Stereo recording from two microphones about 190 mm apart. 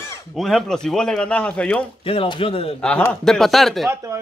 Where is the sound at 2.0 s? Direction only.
30° left (ahead or behind).